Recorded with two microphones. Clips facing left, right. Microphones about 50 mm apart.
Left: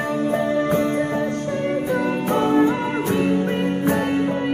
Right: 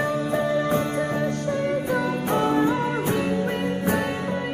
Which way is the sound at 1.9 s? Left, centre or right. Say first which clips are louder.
Left 3 dB; left.